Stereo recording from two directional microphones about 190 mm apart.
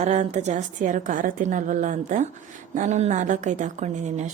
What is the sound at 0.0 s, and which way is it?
A woman's voice, 35° right (ahead or behind).